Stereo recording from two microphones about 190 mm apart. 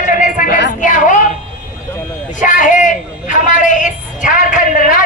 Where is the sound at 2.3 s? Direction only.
45° left (ahead or behind).